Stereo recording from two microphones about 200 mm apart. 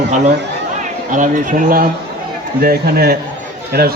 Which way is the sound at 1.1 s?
40° right (ahead or behind).